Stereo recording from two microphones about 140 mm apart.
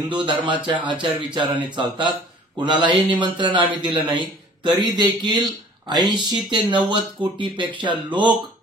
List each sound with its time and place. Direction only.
0.4 s speech: 35° right (ahead or behind)